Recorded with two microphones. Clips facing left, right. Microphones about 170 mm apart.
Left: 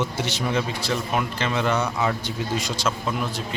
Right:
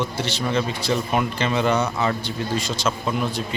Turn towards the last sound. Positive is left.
turn(degrees=0)  # may be behind; listen again after turning